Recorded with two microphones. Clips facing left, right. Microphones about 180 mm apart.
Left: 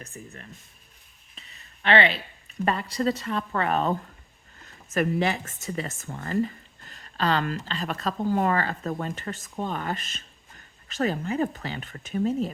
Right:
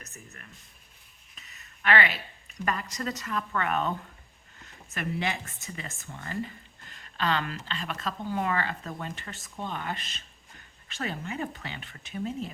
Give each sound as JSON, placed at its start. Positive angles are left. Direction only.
{"t": 0.0, "sound": "speech", "side_deg": 30}